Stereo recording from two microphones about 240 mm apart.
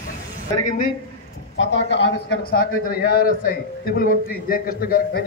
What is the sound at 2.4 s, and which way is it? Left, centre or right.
A man's voice, left.